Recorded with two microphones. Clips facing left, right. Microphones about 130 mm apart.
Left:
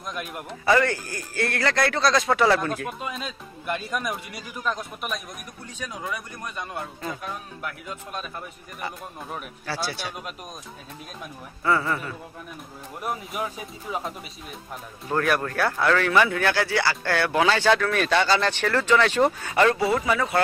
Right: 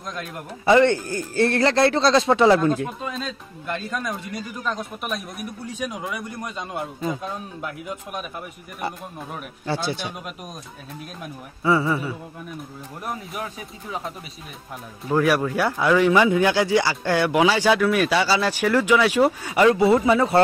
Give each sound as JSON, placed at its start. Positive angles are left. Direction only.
{"t": 0.0, "sound": "speech", "side_deg": 10}
{"t": 0.7, "sound": "speech", "side_deg": -25}
{"t": 3.0, "sound": "speech", "side_deg": 10}
{"t": 5.7, "sound": "speech", "side_deg": -15}
{"t": 9.7, "sound": "speech", "side_deg": -20}
{"t": 11.6, "sound": "speech", "side_deg": -10}
{"t": 13.0, "sound": "speech", "side_deg": 5}
{"t": 15.0, "sound": "speech", "side_deg": -5}
{"t": 19.8, "sound": "speech", "side_deg": -25}